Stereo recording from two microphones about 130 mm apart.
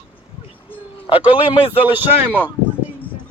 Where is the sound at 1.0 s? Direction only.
40° left (ahead or behind).